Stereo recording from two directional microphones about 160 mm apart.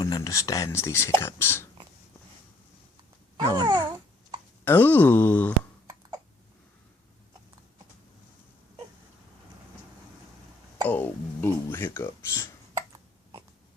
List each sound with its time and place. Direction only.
0.0 s speech: 20° left (ahead or behind)
3.3 s a sound: 25° right (ahead or behind)
4.6 s speech: 10° left (ahead or behind)
10.8 s speech: 10° left (ahead or behind)
12.7 s hiccup: 20° right (ahead or behind)